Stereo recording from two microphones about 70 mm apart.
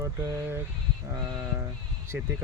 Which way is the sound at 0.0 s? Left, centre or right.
Right.